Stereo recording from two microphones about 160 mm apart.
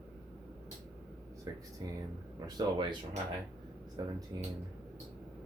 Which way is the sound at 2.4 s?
30° right (ahead or behind).